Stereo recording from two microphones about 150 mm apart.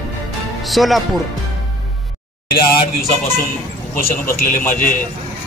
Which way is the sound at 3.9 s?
75° left (ahead or behind).